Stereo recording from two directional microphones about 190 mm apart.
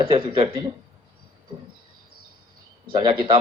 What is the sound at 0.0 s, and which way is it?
Speech, 30° right (ahead or behind).